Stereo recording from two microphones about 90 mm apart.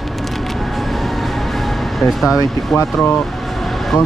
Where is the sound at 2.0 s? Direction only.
5° right (ahead or behind).